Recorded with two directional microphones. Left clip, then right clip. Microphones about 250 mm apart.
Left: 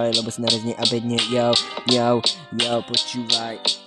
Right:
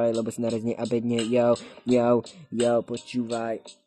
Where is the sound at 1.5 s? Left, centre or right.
Left.